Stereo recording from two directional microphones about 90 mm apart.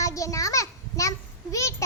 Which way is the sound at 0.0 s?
40° left (ahead or behind).